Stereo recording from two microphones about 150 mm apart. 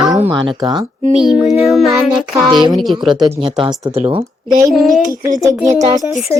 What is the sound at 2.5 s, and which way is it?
Speech, 30° right (ahead or behind).